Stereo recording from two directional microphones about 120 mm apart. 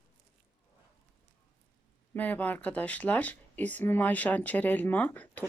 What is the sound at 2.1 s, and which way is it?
Speech, 15° left (ahead or behind).